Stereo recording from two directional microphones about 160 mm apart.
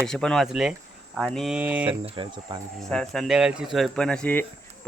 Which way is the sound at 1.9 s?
30° right (ahead or behind).